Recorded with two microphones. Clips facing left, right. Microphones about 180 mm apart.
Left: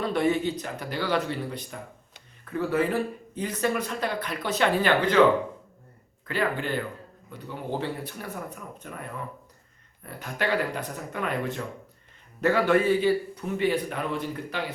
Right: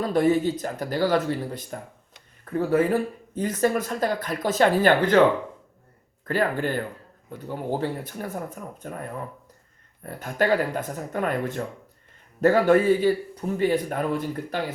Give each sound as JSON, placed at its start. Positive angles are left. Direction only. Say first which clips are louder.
{"t": 0.0, "sound": "speech", "louder": "right 4 dB", "side_deg": -40}
{"t": 6.2, "sound": "speech", "louder": "right 4 dB", "side_deg": -45}